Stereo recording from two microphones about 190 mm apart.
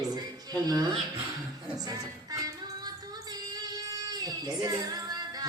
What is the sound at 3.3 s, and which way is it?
Child singing, 20° right (ahead or behind).